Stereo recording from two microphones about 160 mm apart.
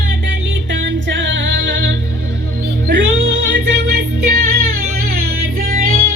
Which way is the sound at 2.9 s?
90° right.